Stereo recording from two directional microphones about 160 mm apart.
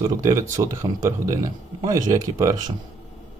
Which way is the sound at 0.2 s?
20° right (ahead or behind).